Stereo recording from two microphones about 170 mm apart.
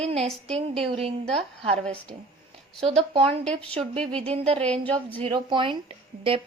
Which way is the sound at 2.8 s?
35° right (ahead or behind).